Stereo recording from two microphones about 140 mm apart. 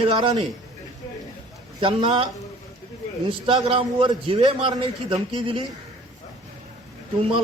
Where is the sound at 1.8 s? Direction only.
40° right (ahead or behind).